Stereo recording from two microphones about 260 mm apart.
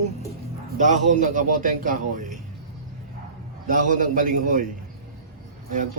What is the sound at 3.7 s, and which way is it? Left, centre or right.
Speech, right.